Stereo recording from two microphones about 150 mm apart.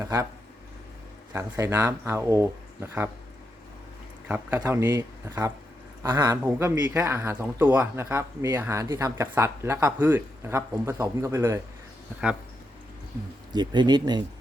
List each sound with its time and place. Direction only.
0.0 s a sound: 20° right (ahead or behind)
1.3 s speech: 20° right (ahead or behind)
4.3 s speech: 10° right (ahead or behind)
13.5 s speech: 30° right (ahead or behind)